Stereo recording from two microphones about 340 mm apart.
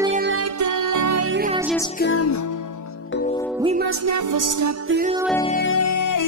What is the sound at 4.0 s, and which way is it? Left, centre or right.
Music, right.